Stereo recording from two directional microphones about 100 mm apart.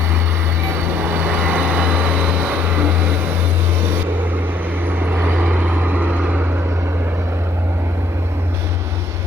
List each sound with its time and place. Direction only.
0.7 s vehicle: 20° right (ahead or behind)
4.9 s vehicle: 20° right (ahead or behind)